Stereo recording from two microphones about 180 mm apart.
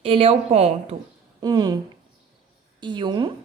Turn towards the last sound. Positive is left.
turn(degrees=-25)  # may be behind; listen again after turning